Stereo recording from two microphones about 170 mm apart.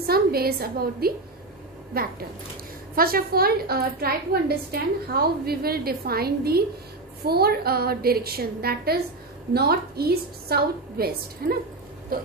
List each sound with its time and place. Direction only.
0.0 s a woman's voice: 65° right (ahead or behind)